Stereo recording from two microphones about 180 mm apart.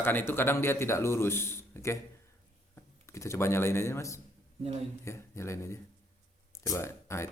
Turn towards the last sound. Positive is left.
turn(degrees=15)  # may be behind; listen again after turning